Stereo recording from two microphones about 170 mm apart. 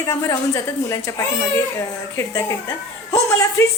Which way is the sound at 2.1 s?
15° left (ahead or behind).